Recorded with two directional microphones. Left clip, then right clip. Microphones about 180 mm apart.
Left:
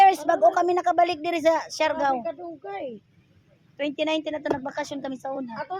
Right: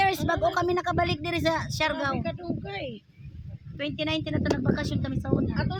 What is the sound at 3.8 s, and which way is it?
Speech, 20° right (ahead or behind).